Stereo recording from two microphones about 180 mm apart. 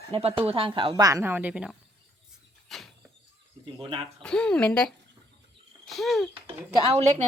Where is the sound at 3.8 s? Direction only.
30° right (ahead or behind).